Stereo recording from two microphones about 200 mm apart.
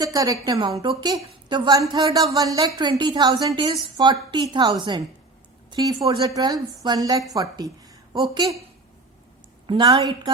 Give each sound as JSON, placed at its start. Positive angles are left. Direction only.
{"t": 0.0, "sound": "speech", "side_deg": -15}
{"t": 9.6, "sound": "speech", "side_deg": -25}